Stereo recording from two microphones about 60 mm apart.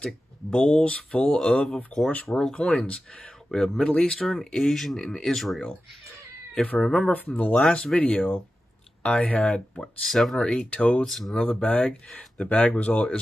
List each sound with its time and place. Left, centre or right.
0.0 s speech: centre
3.4 s speech: centre
6.8 s speech: centre
7.1 s speech: left
10.0 s speech: centre
10.3 s speech: centre
11.1 s speech: centre
11.3 s speech: left